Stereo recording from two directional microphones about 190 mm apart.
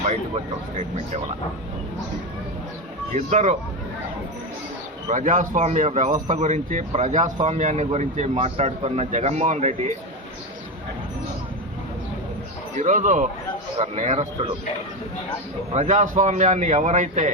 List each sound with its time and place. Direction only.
3.2 s speech: 40° right (ahead or behind)
5.1 s speech: 40° right (ahead or behind)
12.8 s speech: 40° right (ahead or behind)
15.7 s speech: 40° right (ahead or behind)